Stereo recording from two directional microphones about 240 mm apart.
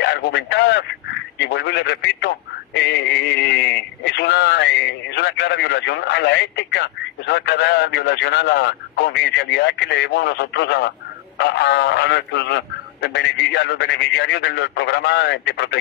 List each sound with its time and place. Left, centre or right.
0.0 s speech: left